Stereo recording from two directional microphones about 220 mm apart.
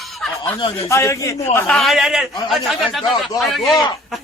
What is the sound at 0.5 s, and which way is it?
Speech, 25° left (ahead or behind).